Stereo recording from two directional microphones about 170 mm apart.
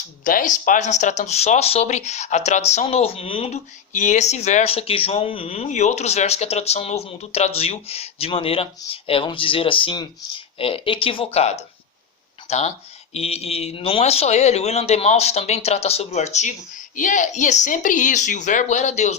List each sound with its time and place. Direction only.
0.3 s speech: 50° left (ahead or behind)